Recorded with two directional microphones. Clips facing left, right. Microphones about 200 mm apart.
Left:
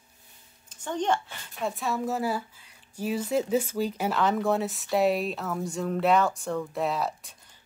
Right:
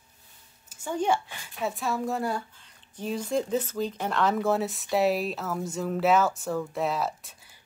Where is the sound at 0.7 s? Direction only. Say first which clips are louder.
Right 1 dB; 10° right (ahead or behind).